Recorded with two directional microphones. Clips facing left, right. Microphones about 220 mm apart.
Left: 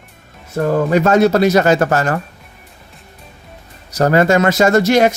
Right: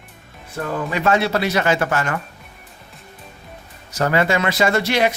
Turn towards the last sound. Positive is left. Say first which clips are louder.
# left 7 dB
turn(degrees=45)  # may be behind; listen again after turning